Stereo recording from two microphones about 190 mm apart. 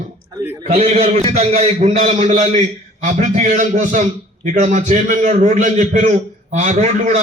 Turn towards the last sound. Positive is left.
turn(degrees=-40)  # may be behind; listen again after turning